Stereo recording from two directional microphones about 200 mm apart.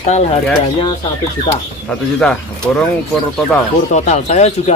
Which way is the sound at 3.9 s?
35° left (ahead or behind).